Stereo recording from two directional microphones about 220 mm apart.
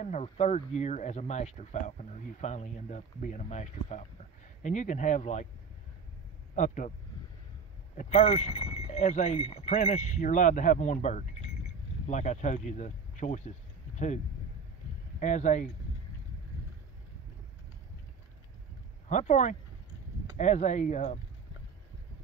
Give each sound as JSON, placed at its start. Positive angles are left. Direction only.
{"t": 0.0, "sound": "speech", "side_deg": 30}
{"t": 6.5, "sound": "speech", "side_deg": 35}
{"t": 7.9, "sound": "speech", "side_deg": 30}
{"t": 19.0, "sound": "speech", "side_deg": 35}